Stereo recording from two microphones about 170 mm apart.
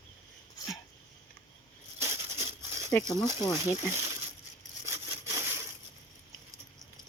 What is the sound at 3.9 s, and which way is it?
Speech, 15° right (ahead or behind).